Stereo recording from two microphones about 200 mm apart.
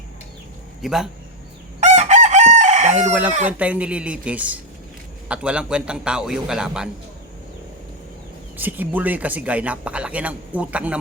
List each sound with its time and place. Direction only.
0.8 s a man's voice: centre (ahead or behind)
1.8 s chicken: 35° right (ahead or behind)
3.0 s a man's voice: 10° right (ahead or behind)
8.5 s speech: 10° right (ahead or behind)